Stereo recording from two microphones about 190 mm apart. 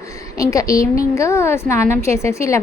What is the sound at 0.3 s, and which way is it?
A woman's voice, 15° left (ahead or behind).